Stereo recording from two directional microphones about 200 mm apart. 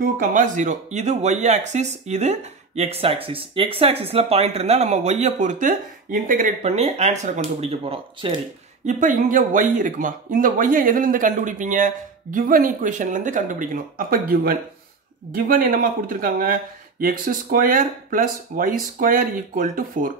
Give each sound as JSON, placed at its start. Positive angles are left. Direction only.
{"t": 0.0, "sound": "speech", "side_deg": -40}
{"t": 8.8, "sound": "speech", "side_deg": -40}